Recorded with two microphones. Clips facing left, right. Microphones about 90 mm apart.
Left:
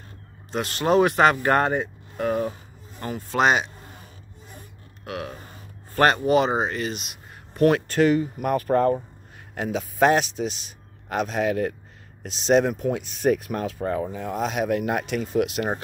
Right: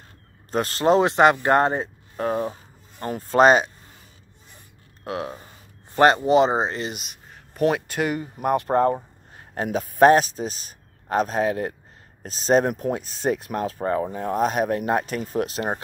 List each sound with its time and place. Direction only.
0.5 s a man's voice: 40° right (ahead or behind)
5.0 s speech: 25° right (ahead or behind)
6.9 s a sound: centre (ahead or behind)
7.7 s speech: 10° right (ahead or behind)
8.4 s speech: 25° right (ahead or behind)
9.6 s a man's voice: 45° right (ahead or behind); by 11.7 s 30° right (ahead or behind)
12.2 s a man's voice: 40° right (ahead or behind)